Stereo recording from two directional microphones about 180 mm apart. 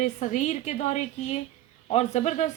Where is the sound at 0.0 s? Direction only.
40° left (ahead or behind).